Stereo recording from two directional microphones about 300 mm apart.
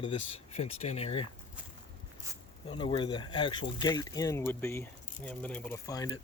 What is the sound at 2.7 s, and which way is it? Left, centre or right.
Speech, centre.